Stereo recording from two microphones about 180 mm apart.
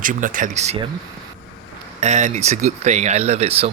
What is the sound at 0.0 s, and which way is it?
Speech, 45° right (ahead or behind).